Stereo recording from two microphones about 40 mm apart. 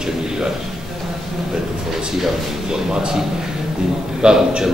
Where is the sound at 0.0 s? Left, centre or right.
Centre.